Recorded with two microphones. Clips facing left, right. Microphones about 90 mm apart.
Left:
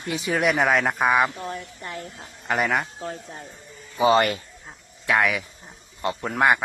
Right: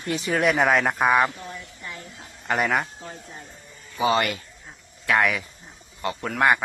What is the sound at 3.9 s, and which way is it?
Speech, 30° left (ahead or behind).